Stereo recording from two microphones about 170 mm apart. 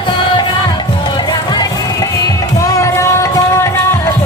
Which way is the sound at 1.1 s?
25° left (ahead or behind).